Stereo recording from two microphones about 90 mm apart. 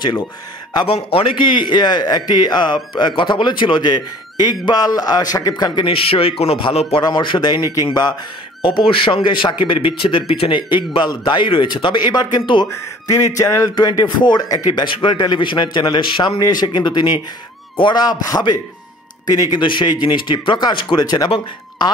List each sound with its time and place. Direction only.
0.8 s a man's voice: 80° left; by 5.9 s 50° left (ahead or behind)
5.9 s speech: 90° left
7.0 s a man's voice: 55° left (ahead or behind)
8.6 s speech: 70° left (ahead or behind); by 12.6 s 55° left (ahead or behind)
12.6 s speech: 35° left (ahead or behind)
13.7 s a man's voice: 50° left (ahead or behind)
14.7 s speech: 65° left (ahead or behind)
16.3 s a man's voice: 50° left (ahead or behind)
19.6 s speech: 60° left (ahead or behind)
21.0 s a man's voice: 45° left (ahead or behind)
21.3 s speech: 55° left (ahead or behind)